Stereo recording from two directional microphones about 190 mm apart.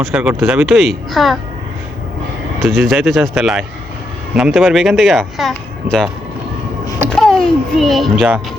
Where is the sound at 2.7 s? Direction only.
Centre (ahead or behind).